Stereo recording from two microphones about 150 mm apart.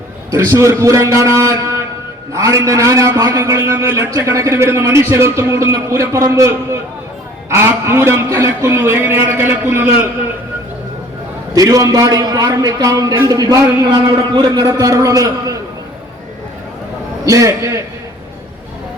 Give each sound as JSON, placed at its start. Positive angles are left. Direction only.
{"t": 0.3, "sound": "a man's voice", "side_deg": -20}
{"t": 7.5, "sound": "a man's voice", "side_deg": -15}
{"t": 11.5, "sound": "a man's voice", "side_deg": -25}
{"t": 17.2, "sound": "a man's voice", "side_deg": -20}